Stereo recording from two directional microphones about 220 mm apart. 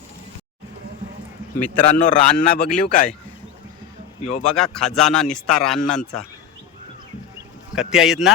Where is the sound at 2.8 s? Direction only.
35° left (ahead or behind).